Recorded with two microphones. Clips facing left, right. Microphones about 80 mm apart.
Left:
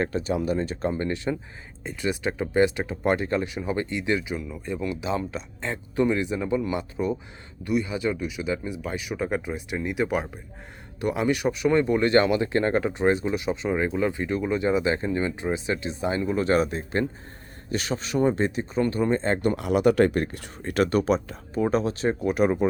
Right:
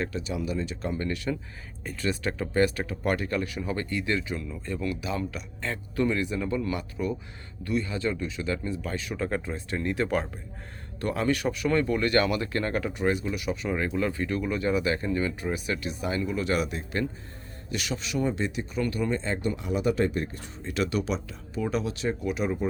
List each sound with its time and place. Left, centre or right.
0.0 s speech: left
22.4 s speech: left